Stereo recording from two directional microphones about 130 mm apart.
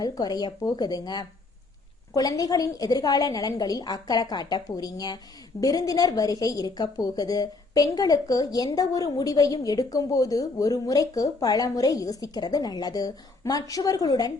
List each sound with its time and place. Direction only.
0.0 s a woman's voice: 30° left (ahead or behind)